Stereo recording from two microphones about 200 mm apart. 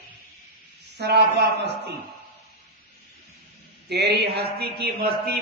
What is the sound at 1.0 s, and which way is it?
Speech, 55° right (ahead or behind).